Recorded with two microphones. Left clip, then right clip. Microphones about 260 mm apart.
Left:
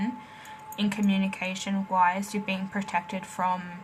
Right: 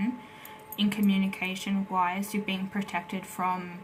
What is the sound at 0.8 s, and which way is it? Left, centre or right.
Speech, left.